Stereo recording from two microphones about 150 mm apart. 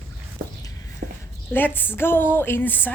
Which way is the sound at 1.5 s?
10° left (ahead or behind).